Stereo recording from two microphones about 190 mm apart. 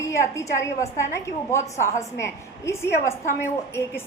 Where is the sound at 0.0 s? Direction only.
15° left (ahead or behind).